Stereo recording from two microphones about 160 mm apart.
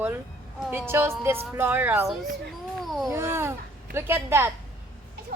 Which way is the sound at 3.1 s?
15° right (ahead or behind).